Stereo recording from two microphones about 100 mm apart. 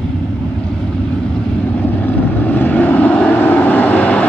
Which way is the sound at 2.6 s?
15° left (ahead or behind).